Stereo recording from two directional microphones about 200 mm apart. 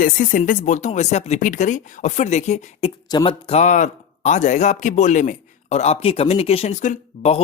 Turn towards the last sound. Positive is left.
turn(degrees=35)  # may be behind; listen again after turning